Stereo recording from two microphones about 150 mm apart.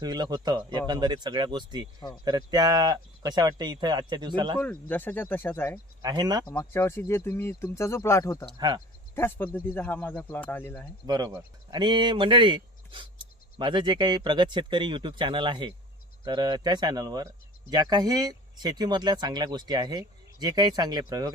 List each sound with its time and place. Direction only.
0.0 s speech: 25° right (ahead or behind)
4.6 s speech: 10° left (ahead or behind)
6.0 s speech: 25° right (ahead or behind)
6.6 s speech: 15° left (ahead or behind)
8.5 s speech: 30° right (ahead or behind)
9.1 s speech: 15° left (ahead or behind)
11.0 s speech: 25° right (ahead or behind)